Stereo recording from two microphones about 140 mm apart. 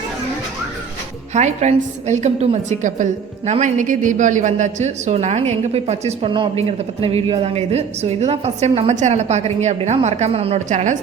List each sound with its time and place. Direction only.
1.3 s a woman's voice: 55° right (ahead or behind)